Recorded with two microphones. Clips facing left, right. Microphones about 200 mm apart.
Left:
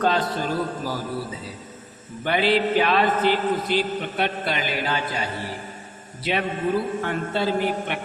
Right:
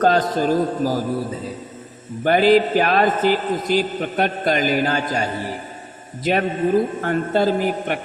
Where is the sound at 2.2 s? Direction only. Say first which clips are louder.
Right 6 dB; 45° right (ahead or behind).